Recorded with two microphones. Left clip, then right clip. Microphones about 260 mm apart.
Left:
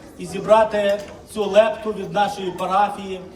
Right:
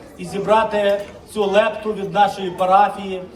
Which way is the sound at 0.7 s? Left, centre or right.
Centre.